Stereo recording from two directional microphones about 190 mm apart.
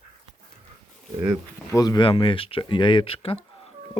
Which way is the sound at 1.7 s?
20° left (ahead or behind).